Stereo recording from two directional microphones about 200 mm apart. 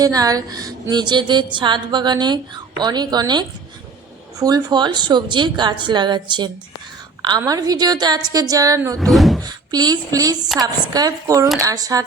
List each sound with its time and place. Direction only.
0.0 s a woman's voice: 20° right (ahead or behind)
9.0 s speech: centre (ahead or behind)
9.4 s a woman's voice: 20° right (ahead or behind)